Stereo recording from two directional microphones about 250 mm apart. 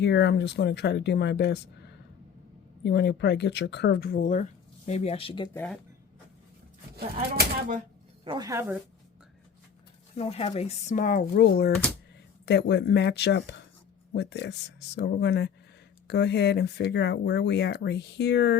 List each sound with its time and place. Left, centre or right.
0.0 s speech: left
5.5 s speech: centre
6.9 s speech: right
8.2 s speech: centre
10.2 s speech: left